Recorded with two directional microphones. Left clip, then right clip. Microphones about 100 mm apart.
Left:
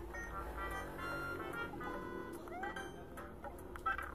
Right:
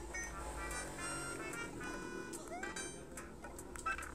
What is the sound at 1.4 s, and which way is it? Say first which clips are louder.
Music: left 1 dB; 40° right (ahead or behind).